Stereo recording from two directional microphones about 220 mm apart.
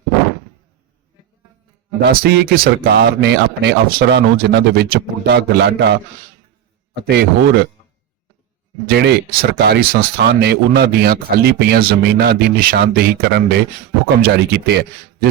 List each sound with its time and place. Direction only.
2.0 s speech: 45° right (ahead or behind)
7.1 s speech: 45° right (ahead or behind)
9.0 s speech: 45° right (ahead or behind)